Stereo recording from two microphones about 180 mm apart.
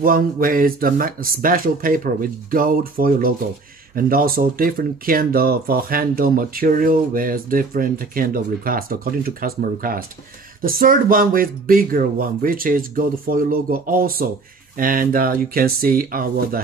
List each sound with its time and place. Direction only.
0.0 s speech: 50° right (ahead or behind)